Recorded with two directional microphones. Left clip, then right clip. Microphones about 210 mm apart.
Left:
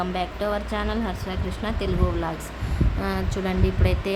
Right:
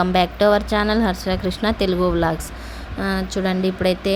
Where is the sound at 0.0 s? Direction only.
30° right (ahead or behind).